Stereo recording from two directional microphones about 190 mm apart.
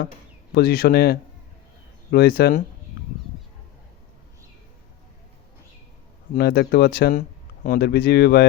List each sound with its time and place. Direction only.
0.5 s speech: 55° left (ahead or behind)
6.3 s speech: 55° left (ahead or behind)